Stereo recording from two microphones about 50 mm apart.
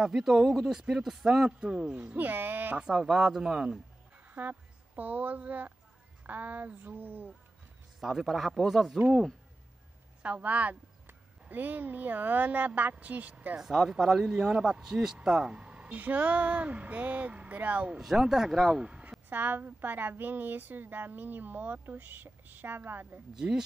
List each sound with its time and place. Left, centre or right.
0.0 s speech: centre
2.0 s a woman's voice: right
2.8 s speech: centre
4.3 s a woman's voice: right
8.0 s a man's voice: centre
10.2 s a woman's voice: right
13.6 s speech: centre; by 18.0 s right
18.0 s speech: centre
18.8 s a sound: right
19.2 s a woman's voice: right
23.4 s speech: right